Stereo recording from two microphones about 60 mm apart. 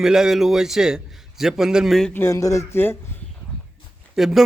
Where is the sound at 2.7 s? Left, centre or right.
Left.